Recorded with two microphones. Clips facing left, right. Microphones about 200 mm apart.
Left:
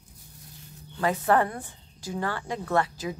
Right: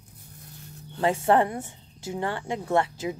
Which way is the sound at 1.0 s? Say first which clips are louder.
Right 2 dB; 25° right (ahead or behind).